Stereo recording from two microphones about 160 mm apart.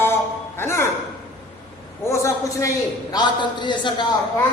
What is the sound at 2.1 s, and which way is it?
Speech, 20° left (ahead or behind).